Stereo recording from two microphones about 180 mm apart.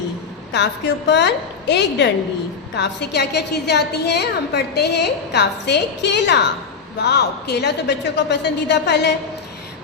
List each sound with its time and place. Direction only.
0.5 s a woman's voice: 70° left (ahead or behind)